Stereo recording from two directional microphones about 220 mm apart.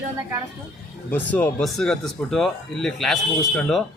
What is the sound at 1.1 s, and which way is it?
Speech, 10° left (ahead or behind).